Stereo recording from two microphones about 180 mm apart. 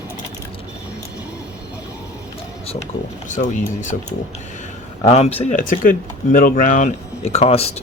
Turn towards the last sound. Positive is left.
turn(degrees=35)  # may be behind; listen again after turning